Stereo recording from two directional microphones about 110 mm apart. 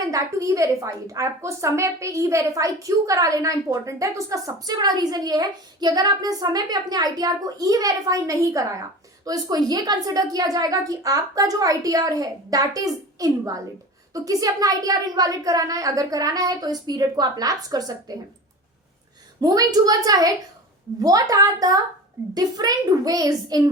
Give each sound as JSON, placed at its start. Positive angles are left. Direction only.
{"t": 0.1, "sound": "a woman's voice", "side_deg": -30}
{"t": 19.4, "sound": "a woman's voice", "side_deg": -35}